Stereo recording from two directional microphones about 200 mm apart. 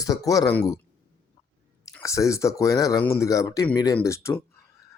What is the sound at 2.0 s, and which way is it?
Speech, 15° left (ahead or behind).